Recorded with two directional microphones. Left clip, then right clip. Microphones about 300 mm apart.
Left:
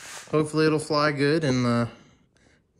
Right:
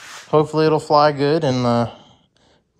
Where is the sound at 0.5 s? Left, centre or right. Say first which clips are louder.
Right 7 dB; centre.